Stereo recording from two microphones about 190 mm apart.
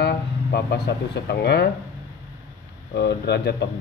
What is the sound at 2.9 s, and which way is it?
Speech, 60° left (ahead or behind).